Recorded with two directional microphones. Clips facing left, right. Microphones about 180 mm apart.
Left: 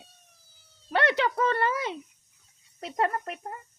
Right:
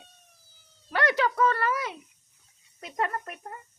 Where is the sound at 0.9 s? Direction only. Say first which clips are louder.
Left 1 dB; 25° left (ahead or behind).